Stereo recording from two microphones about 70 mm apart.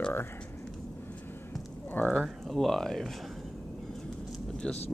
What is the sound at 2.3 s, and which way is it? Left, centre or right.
Speech, centre.